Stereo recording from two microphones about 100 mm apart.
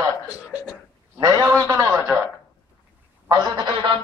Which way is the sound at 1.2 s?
40° right (ahead or behind).